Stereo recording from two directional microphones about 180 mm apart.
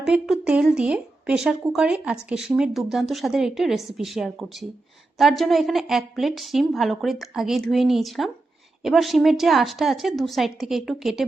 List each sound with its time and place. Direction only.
0.0 s speech: 5° right (ahead or behind)